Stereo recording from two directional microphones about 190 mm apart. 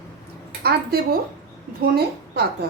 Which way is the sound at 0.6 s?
55° right (ahead or behind).